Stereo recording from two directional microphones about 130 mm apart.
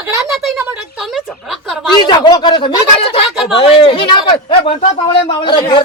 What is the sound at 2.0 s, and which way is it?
Speech, 35° left (ahead or behind).